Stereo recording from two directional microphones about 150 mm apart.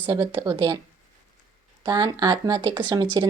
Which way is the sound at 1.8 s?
25° right (ahead or behind).